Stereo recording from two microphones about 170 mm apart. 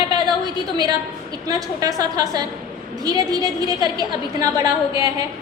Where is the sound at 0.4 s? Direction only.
25° right (ahead or behind).